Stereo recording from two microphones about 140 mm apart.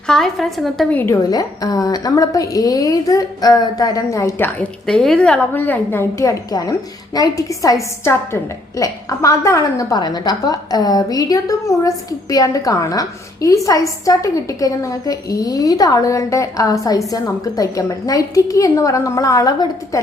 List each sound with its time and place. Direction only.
0.1 s a woman's voice: centre (ahead or behind)
0.9 s a woman's voice: 20° left (ahead or behind)
4.9 s a woman's voice: 5° left (ahead or behind); by 20.0 s 25° left (ahead or behind)